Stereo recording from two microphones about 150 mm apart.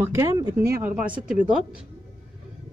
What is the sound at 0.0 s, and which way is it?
A woman's voice, 15° right (ahead or behind).